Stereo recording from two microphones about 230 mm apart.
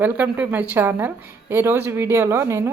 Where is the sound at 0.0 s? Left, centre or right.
Centre.